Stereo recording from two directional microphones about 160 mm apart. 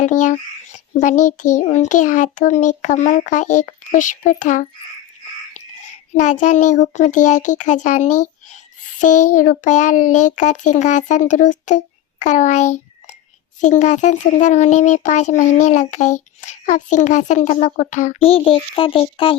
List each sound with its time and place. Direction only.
0.0 s a child's voice: 50° left (ahead or behind)
6.1 s a child's voice: 50° left (ahead or behind)
18.3 s a child's voice: 35° left (ahead or behind)